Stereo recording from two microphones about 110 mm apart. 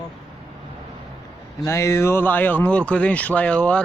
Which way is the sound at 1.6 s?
25° left (ahead or behind).